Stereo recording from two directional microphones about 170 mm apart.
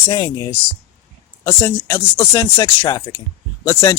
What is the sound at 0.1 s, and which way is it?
Speech, 25° left (ahead or behind).